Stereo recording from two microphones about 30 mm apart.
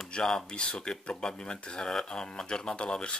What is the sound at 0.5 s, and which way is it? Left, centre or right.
Speech, left.